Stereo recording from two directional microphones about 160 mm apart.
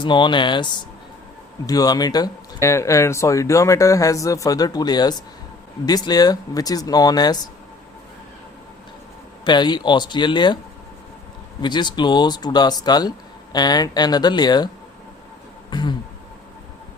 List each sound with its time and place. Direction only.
0.0 s speech: 30° left (ahead or behind)
9.4 s speech: 25° left (ahead or behind)
11.6 s speech: 30° left (ahead or behind)
15.7 s a sound: 25° left (ahead or behind)